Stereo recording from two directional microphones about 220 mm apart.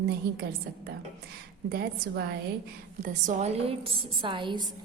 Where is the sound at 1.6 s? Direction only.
45° right (ahead or behind).